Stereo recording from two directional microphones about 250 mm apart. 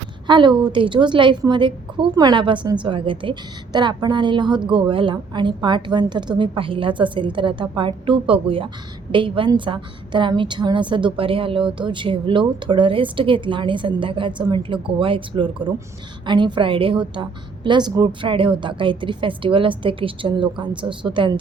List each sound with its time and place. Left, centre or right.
0.3 s a woman's voice: centre